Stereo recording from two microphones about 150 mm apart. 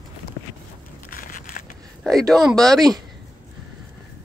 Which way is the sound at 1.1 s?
65° left (ahead or behind).